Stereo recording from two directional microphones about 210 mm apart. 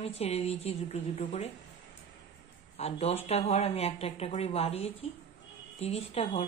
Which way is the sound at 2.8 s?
30° left (ahead or behind).